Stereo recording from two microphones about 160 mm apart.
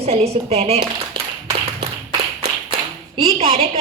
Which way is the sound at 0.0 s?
40° right (ahead or behind).